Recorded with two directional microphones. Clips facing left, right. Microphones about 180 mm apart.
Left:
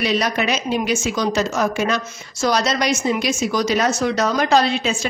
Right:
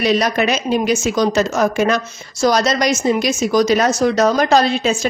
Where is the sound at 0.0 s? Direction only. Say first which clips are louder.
Right 4 dB; 45° right (ahead or behind).